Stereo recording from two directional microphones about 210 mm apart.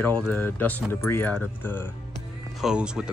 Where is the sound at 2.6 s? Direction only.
5° right (ahead or behind).